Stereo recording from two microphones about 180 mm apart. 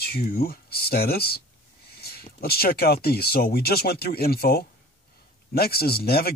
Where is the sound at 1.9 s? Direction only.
60° left (ahead or behind).